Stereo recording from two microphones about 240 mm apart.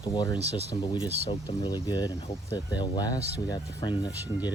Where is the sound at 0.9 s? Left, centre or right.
Centre.